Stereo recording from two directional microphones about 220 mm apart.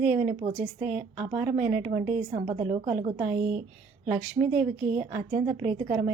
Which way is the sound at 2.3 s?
30° right (ahead or behind).